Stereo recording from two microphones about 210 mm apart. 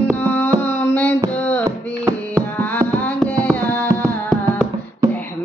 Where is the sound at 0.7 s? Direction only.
5° left (ahead or behind).